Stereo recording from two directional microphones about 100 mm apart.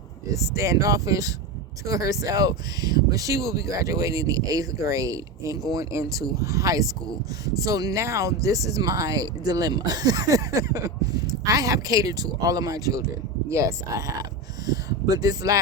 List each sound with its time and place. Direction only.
0.3 s speech: 30° right (ahead or behind)